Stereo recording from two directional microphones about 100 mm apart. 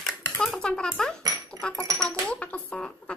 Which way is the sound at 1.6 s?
10° left (ahead or behind).